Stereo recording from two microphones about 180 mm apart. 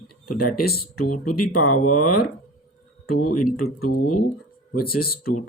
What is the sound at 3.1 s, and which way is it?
Speech, 55° left (ahead or behind).